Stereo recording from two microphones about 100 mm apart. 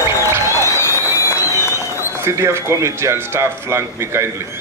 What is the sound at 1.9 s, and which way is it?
Speech, 25° right (ahead or behind).